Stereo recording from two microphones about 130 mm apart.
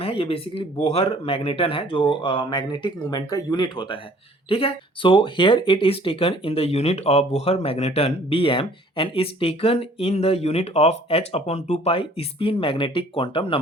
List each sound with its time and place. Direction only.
0.0 s speech: 45° left (ahead or behind)